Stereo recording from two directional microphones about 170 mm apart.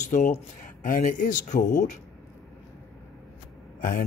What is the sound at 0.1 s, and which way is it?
Speech, 50° left (ahead or behind).